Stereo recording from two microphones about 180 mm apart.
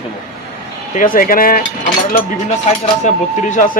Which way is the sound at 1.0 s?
50° left (ahead or behind).